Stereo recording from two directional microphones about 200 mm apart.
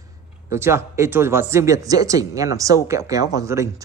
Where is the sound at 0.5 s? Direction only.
15° right (ahead or behind).